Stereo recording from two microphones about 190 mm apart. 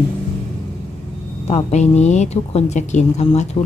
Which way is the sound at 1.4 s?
35° left (ahead or behind).